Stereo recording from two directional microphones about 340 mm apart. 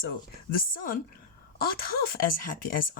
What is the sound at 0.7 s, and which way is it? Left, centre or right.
Speech, left.